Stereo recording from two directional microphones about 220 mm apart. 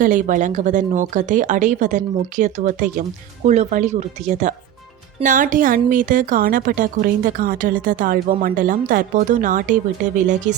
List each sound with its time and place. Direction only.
0.0 s speech: 35° right (ahead or behind)